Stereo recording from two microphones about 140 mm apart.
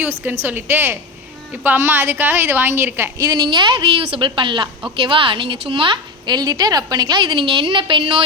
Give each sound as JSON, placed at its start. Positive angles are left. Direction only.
{"t": 0.4, "sound": "a woman's voice", "side_deg": -15}
{"t": 3.2, "sound": "a woman's voice", "side_deg": -30}